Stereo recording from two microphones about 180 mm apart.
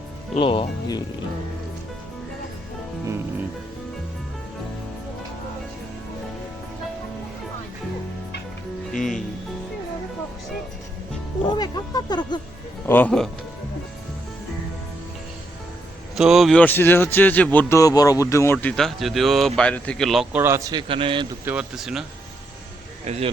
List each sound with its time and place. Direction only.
0.3 s speech: 30° left (ahead or behind)
9.0 s music: centre (ahead or behind)
11.4 s speech: 25° left (ahead or behind)
12.9 s a man's voice: 10° left (ahead or behind)
16.1 s a man's voice: centre (ahead or behind)
20.4 s a man's voice: 15° right (ahead or behind)
21.4 s speech: 5° right (ahead or behind)
23.0 s speech: 35° right (ahead or behind)